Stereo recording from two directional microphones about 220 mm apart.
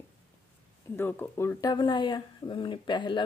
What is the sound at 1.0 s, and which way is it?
Speech, 10° left (ahead or behind).